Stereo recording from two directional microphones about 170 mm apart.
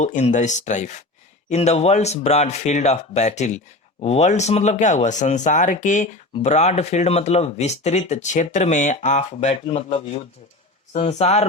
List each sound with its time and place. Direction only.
0.0 s speech: 45° left (ahead or behind)